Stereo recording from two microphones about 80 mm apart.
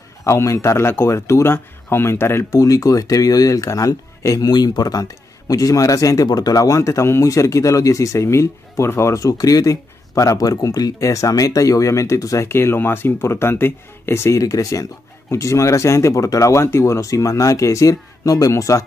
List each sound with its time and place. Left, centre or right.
0.2 s speech: left
2.6 s a man's voice: left
4.5 s a man's voice: left
12.4 s speech: left
14.4 s a man's voice: left